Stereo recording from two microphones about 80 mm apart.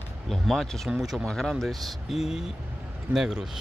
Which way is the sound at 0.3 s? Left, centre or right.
Centre.